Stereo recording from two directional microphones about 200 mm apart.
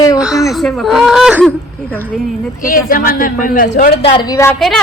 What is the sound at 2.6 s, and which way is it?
A man's voice, 45° left (ahead or behind).